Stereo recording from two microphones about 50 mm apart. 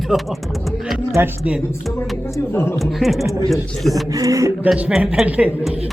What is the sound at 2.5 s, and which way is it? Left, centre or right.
Speech, left.